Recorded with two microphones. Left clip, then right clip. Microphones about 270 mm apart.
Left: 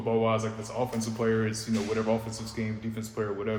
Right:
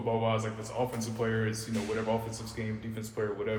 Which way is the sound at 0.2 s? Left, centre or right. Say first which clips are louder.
Left 4 dB; left.